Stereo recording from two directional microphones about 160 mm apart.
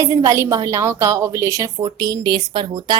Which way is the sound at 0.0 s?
20° right (ahead or behind).